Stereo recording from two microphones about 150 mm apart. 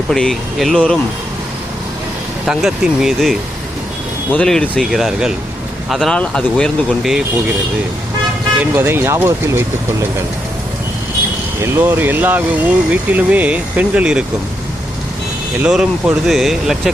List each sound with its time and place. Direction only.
0.1 s speech: 5° left (ahead or behind)
2.5 s speech: 5° right (ahead or behind)
8.7 s speech: 15° right (ahead or behind)
11.6 s speech: 15° right (ahead or behind)
15.6 s speech: 5° right (ahead or behind)